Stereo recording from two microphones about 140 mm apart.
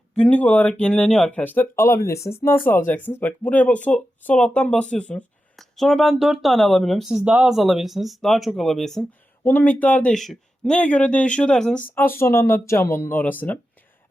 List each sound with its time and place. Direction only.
0.2 s speech: 10° left (ahead or behind)
9.4 s speech: 15° left (ahead or behind)
11.9 s speech: 15° left (ahead or behind)